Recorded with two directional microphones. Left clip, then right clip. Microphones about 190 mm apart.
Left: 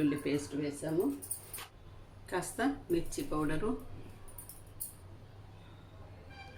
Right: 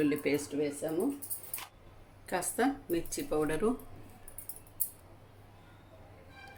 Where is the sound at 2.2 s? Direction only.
45° right (ahead or behind).